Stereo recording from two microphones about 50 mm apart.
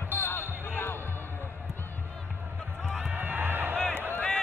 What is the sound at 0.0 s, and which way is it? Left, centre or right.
Basketball bounce, left.